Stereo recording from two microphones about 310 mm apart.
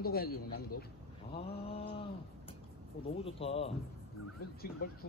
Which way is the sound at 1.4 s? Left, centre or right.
Centre.